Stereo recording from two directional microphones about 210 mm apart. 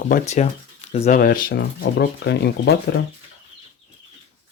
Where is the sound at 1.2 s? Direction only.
40° left (ahead or behind).